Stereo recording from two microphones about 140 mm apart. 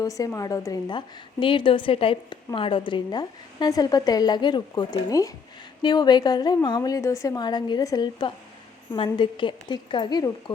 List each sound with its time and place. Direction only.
0.0 s a woman's voice: 25° left (ahead or behind)